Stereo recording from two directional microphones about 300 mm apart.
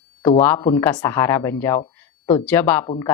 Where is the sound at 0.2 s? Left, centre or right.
Centre.